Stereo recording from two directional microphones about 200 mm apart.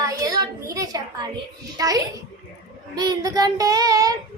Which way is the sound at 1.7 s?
20° right (ahead or behind).